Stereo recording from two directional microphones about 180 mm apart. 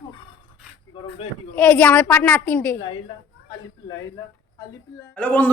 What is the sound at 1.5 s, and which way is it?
A man's voice, 5° left (ahead or behind).